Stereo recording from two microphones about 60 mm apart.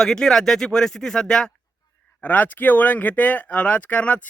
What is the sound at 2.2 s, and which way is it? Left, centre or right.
Speech, left.